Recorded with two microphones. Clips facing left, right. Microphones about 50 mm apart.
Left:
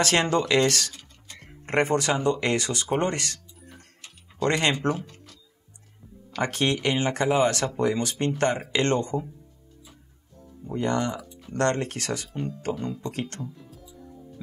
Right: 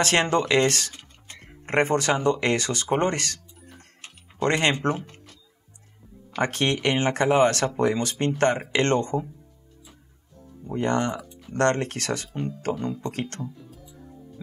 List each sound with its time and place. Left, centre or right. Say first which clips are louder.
0.0 s speech: right 1 dB; right
4.0 s music: right 1 dB; right
6.4 s speech: right 1 dB; right
10.8 s speech: right 2 dB; right
12.7 s speech: right 2 dB; centre
13.0 s speech: right 1 dB; right